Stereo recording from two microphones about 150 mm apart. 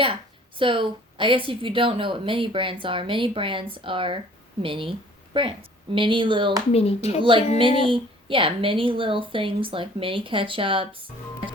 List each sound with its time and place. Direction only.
0.6 s a woman's voice: 35° right (ahead or behind)
6.7 s speech: 45° left (ahead or behind)
7.2 s a woman's voice: 35° right (ahead or behind)